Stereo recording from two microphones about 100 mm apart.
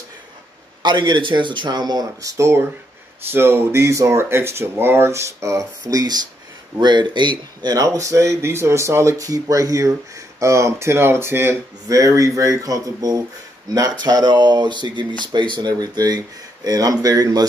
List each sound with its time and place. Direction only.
0.8 s speech: 50° right (ahead or behind)
2.3 s speech: 30° right (ahead or behind); by 7.7 s 50° right (ahead or behind)
7.7 s speech: 35° right (ahead or behind)